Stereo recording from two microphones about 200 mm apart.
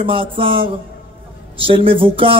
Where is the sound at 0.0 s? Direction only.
25° right (ahead or behind).